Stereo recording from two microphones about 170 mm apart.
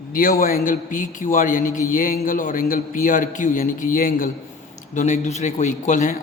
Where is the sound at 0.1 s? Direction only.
55° left (ahead or behind).